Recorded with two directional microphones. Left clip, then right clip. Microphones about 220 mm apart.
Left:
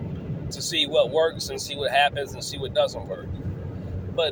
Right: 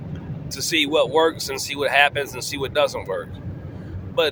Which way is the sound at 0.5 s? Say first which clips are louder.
Right 2 dB; 30° right (ahead or behind).